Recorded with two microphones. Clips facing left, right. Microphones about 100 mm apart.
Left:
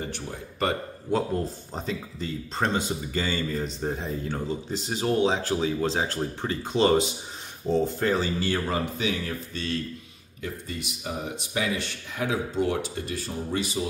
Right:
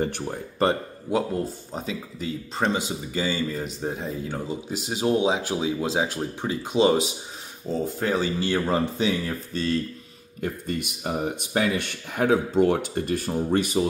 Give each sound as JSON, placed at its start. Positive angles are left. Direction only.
{"t": 1.1, "sound": "speech", "side_deg": -5}
{"t": 8.9, "sound": "speech", "side_deg": -35}
{"t": 10.4, "sound": "speech", "side_deg": -55}